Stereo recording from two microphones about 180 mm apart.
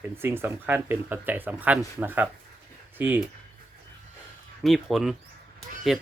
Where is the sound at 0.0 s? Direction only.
15° right (ahead or behind).